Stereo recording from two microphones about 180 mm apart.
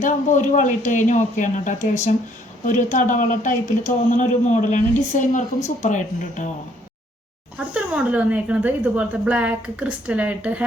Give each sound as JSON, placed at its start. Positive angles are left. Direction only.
{"t": 0.0, "sound": "a man's voice", "side_deg": 45}
{"t": 7.7, "sound": "a woman's voice", "side_deg": -5}